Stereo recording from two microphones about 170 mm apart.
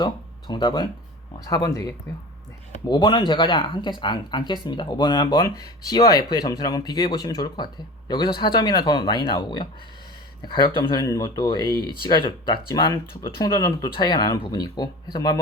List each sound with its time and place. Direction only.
0.0 s speech: 25° left (ahead or behind)